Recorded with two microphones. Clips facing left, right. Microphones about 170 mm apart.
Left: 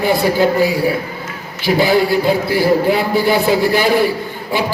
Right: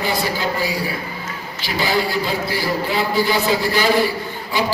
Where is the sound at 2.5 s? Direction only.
55° left (ahead or behind).